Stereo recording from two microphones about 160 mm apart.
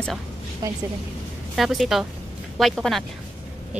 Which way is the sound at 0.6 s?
25° right (ahead or behind).